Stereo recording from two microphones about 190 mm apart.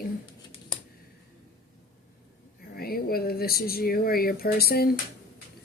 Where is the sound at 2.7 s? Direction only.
55° left (ahead or behind).